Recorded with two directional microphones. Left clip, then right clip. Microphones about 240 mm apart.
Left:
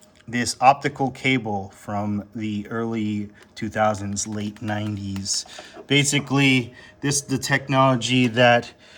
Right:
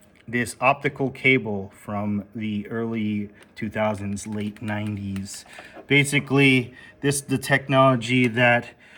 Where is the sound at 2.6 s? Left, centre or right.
Centre.